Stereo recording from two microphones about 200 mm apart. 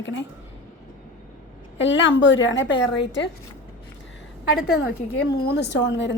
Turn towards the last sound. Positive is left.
turn(degrees=60)  # may be behind; listen again after turning